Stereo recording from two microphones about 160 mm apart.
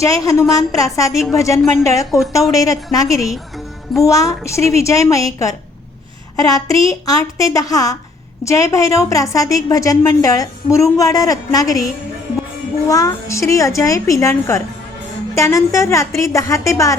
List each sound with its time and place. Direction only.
0.0 s a woman's voice: 20° left (ahead or behind)
12.9 s a woman's voice: 20° left (ahead or behind)